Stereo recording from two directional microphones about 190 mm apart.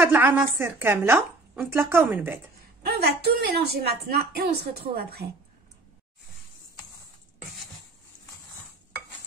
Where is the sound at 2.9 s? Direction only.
55° right (ahead or behind).